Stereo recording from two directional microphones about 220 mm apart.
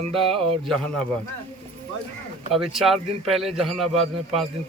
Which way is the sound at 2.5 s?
Centre (ahead or behind).